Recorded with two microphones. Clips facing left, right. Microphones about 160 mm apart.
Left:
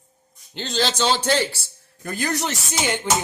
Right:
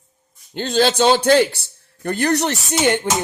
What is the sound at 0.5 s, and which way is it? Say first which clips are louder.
Speech: right 7 dB; 50° right (ahead or behind).